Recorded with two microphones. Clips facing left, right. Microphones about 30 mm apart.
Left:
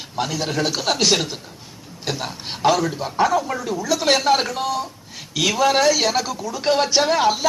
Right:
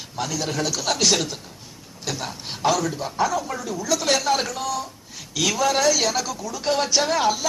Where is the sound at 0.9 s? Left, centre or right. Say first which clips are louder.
Left 1 dB; centre.